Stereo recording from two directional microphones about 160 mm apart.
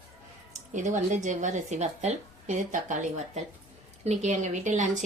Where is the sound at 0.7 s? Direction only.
50° right (ahead or behind).